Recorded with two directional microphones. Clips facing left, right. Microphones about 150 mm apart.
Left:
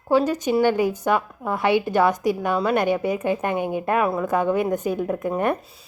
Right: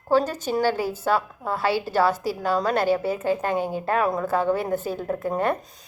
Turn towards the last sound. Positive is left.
turn(degrees=15)  # may be behind; listen again after turning